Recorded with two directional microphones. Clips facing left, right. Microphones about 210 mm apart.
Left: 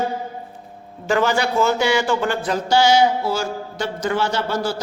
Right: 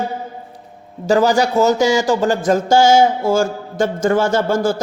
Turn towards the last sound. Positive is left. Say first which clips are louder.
# right 6 dB
turn(degrees=-50)  # may be behind; listen again after turning